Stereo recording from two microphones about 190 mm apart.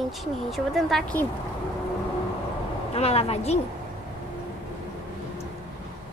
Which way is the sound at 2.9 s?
35° left (ahead or behind).